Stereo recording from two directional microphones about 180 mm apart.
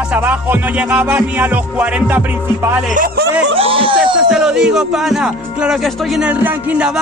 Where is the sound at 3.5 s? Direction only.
30° right (ahead or behind).